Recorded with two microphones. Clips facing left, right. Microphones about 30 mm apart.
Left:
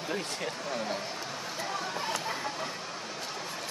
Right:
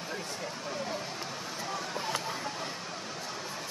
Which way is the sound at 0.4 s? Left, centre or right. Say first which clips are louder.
Left 3 dB; left.